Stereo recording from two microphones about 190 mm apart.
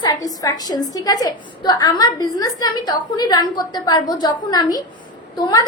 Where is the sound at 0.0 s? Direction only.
20° left (ahead or behind).